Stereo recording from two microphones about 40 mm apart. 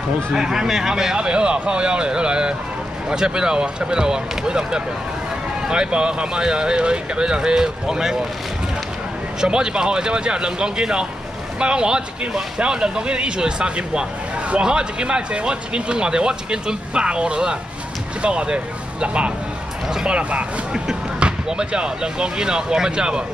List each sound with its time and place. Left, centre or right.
0.3 s speech: centre
1.1 s speech: right
9.4 s speech: centre
20.7 s speech: right